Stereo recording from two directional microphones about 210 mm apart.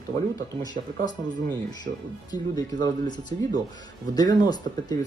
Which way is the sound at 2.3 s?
20° left (ahead or behind).